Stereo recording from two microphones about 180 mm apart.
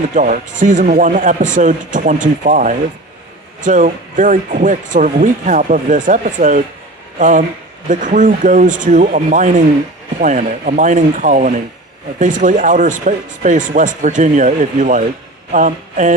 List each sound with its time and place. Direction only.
0.1 s speech: 45° right (ahead or behind)